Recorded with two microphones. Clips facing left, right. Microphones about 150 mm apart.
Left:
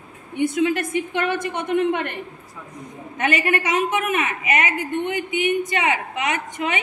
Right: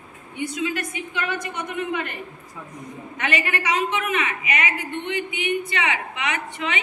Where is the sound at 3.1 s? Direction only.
45° left (ahead or behind).